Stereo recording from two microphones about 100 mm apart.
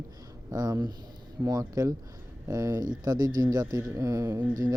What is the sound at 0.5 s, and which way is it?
A man's voice, 40° right (ahead or behind).